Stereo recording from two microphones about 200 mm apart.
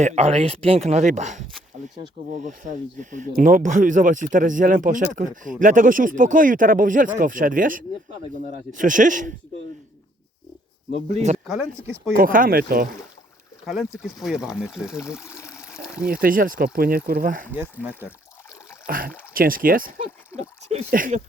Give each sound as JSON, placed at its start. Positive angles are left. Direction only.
{"t": 0.0, "sound": "speech", "side_deg": -35}
{"t": 10.9, "sound": "speech", "side_deg": -35}
{"t": 13.7, "sound": "speech", "side_deg": 0}
{"t": 15.0, "sound": "a sound", "side_deg": 15}
{"t": 15.7, "sound": "a sound", "side_deg": -5}
{"t": 16.0, "sound": "speech", "side_deg": -45}
{"t": 17.5, "sound": "speech", "side_deg": -10}
{"t": 18.9, "sound": "speech", "side_deg": -45}